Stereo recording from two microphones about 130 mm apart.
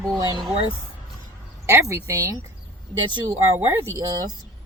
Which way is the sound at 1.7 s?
20° right (ahead or behind).